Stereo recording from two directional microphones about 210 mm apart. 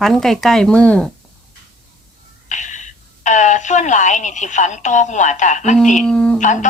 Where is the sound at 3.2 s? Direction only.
35° left (ahead or behind).